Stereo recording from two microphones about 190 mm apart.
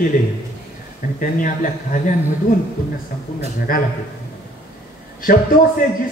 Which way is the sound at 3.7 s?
50° left (ahead or behind).